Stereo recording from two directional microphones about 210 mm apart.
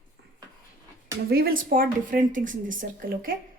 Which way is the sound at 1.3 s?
45° right (ahead or behind).